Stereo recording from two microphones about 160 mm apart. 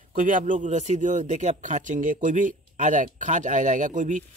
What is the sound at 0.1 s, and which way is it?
Speech, 55° right (ahead or behind).